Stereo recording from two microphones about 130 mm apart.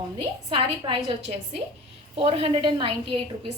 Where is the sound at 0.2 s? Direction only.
45° right (ahead or behind).